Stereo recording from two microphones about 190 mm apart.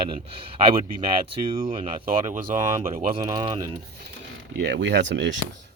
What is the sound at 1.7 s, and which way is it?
Speech, 25° right (ahead or behind).